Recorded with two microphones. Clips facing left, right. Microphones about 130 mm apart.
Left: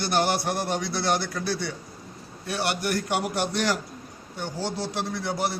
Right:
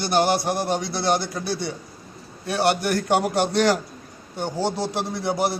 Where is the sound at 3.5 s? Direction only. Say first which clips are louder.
Right 8 dB; 75° right (ahead or behind).